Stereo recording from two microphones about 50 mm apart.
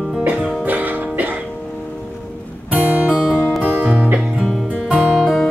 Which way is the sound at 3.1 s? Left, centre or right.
Right.